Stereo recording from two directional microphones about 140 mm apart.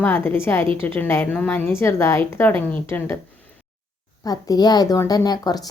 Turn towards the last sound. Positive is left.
turn(degrees=30)  # may be behind; listen again after turning